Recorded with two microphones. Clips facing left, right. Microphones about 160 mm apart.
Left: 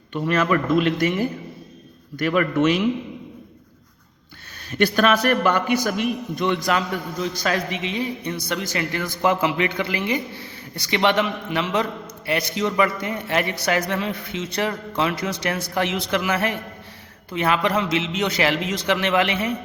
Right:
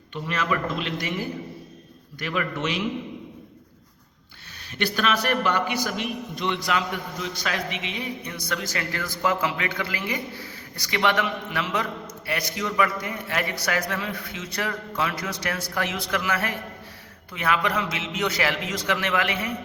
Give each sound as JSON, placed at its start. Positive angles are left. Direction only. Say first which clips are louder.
{"t": 0.1, "sound": "a man's voice", "louder": "left 7 dB", "side_deg": 50}
{"t": 2.1, "sound": "a man's voice", "louder": "left 9 dB", "side_deg": 50}
{"t": 4.8, "sound": "a man's voice", "louder": "left 7 dB", "side_deg": 50}